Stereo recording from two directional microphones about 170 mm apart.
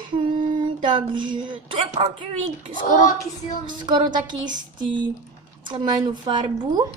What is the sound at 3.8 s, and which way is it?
Speech, 25° right (ahead or behind).